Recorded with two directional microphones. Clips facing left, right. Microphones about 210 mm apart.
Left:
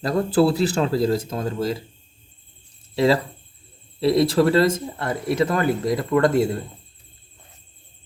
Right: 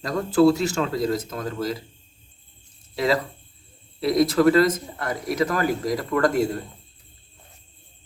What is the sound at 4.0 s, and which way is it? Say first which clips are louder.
Speech: left 1 dB; 30° left (ahead or behind).